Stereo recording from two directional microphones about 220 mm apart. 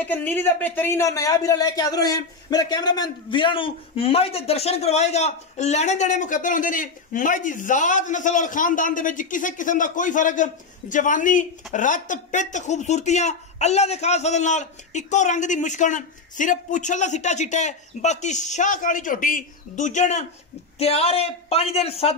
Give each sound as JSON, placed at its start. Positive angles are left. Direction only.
{"t": 0.0, "sound": "a man's voice", "side_deg": 10}